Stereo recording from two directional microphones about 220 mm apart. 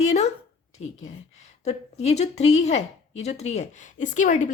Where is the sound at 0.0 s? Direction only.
30° left (ahead or behind).